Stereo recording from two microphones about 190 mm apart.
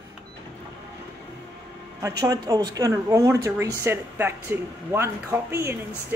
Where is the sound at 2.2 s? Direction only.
20° right (ahead or behind).